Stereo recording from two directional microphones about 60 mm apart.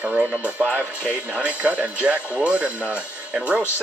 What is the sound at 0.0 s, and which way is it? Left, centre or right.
Speech, right.